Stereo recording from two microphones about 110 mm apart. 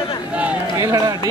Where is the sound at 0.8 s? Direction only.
30° right (ahead or behind).